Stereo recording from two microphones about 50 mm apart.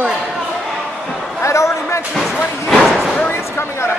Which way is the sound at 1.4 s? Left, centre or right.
Left.